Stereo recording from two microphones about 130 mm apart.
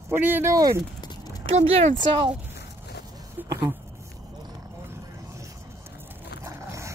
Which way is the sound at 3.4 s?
15° right (ahead or behind).